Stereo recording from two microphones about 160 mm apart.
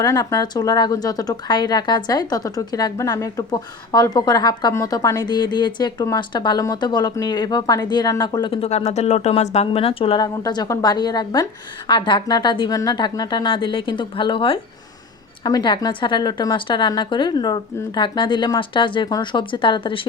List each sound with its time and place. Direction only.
0.0 s speech: 20° left (ahead or behind)
8.6 s a woman's voice: 45° left (ahead or behind)